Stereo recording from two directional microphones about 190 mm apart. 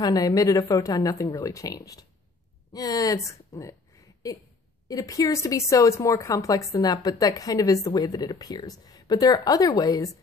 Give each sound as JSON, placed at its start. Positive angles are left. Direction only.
{"t": 0.0, "sound": "speech", "side_deg": 20}